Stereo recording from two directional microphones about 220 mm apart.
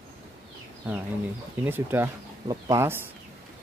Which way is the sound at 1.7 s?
10° right (ahead or behind).